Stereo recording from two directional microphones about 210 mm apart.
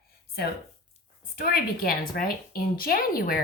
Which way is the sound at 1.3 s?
45° left (ahead or behind).